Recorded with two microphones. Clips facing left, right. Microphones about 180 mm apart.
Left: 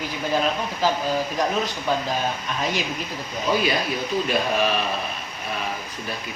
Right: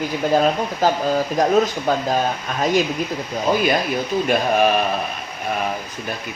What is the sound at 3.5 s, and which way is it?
Speech, 50° right (ahead or behind).